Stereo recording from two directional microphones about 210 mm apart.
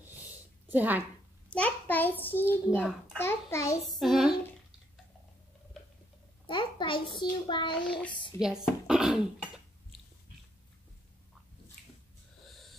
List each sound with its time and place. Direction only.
0.0 s a sound: 10° right (ahead or behind)
1.5 s a child's voice: 5° left (ahead or behind)
2.4 s child singing: 5° right (ahead or behind)
3.2 s a child's voice: 10° left (ahead or behind)
3.8 s child singing: centre (ahead or behind)
6.4 s a child's voice: 25° left (ahead or behind)
8.6 s speech: 5° right (ahead or behind)
12.4 s wheeze: centre (ahead or behind)